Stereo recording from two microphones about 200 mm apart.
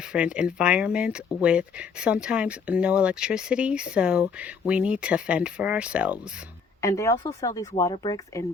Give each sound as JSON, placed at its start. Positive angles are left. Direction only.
{"t": 0.0, "sound": "speech", "side_deg": -5}
{"t": 6.8, "sound": "speech", "side_deg": 15}